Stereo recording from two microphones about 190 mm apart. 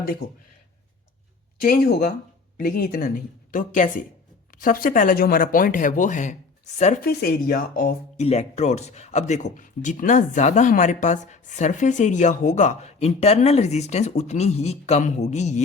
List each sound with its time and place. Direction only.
0.0 s speech: 45° left (ahead or behind)
1.6 s speech: 50° left (ahead or behind)
7.0 s speech: 55° left (ahead or behind)
8.2 s speech: 35° left (ahead or behind)